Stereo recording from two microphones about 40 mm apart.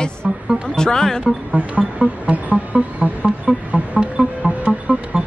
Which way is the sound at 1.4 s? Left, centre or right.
Right.